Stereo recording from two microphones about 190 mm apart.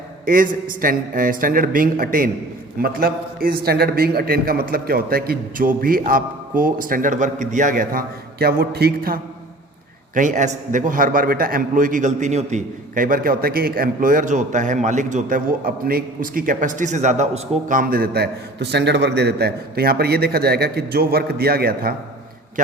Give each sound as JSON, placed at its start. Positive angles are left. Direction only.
{"t": 0.3, "sound": "a man's voice", "side_deg": -45}